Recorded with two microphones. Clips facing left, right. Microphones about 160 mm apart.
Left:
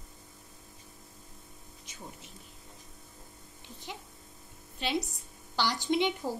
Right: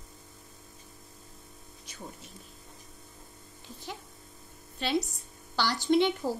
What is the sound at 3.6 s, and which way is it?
Speech, 20° left (ahead or behind).